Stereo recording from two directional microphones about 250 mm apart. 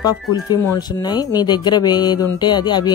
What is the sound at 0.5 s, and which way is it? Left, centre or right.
Speech, centre.